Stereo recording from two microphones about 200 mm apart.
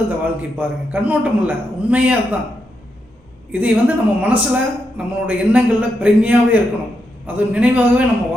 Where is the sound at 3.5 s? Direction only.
5° right (ahead or behind).